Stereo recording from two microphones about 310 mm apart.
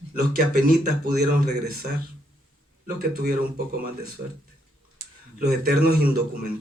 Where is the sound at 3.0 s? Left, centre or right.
Right.